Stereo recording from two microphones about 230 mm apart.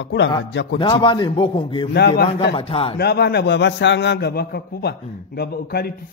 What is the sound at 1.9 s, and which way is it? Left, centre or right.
Speech, left.